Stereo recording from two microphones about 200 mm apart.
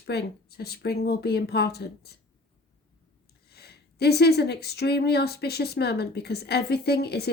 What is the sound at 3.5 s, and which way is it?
Speech, 55° left (ahead or behind).